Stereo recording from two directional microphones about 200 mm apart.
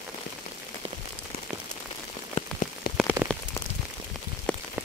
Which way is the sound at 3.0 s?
10° right (ahead or behind).